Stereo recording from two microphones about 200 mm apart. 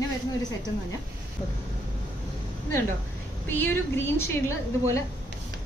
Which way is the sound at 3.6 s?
10° left (ahead or behind).